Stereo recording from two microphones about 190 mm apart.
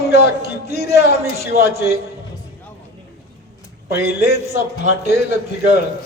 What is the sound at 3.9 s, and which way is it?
Speech, 60° left (ahead or behind).